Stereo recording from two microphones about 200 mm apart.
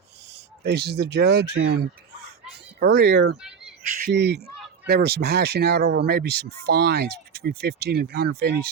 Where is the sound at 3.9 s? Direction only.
50° right (ahead or behind).